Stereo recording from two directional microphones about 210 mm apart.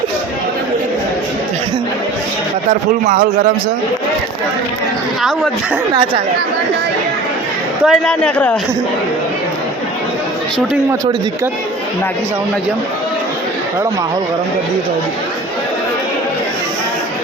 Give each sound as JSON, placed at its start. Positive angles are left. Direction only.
{"t": 3.0, "sound": "a man's voice", "side_deg": -40}
{"t": 7.9, "sound": "speech", "side_deg": 5}